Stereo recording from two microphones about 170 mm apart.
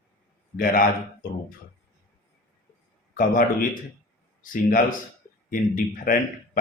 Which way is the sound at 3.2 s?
55° left (ahead or behind).